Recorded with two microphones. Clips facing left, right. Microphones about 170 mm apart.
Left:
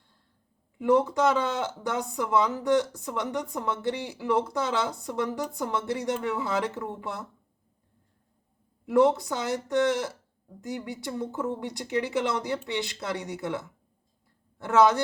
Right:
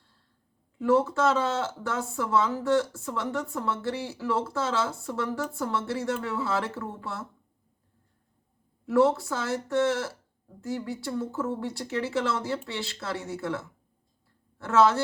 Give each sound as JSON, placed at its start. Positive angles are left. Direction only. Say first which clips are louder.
{"t": 0.8, "sound": "speech", "louder": "left 1 dB", "side_deg": 15}
{"t": 8.9, "sound": "speech", "louder": "left 1 dB", "side_deg": 15}